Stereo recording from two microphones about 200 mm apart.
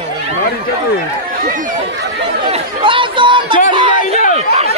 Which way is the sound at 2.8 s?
25° right (ahead or behind).